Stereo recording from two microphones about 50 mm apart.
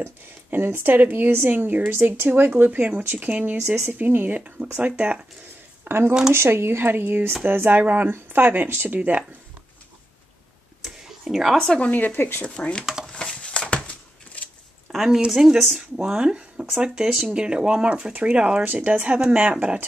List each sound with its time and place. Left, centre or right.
0.0 s speech: right
4.7 s speech: right
5.9 s speech: right
10.8 s a sound: centre
11.9 s speech: left
12.4 s speech: left
13.1 s a sound: left
15.0 s speech: centre
16.0 s speech: centre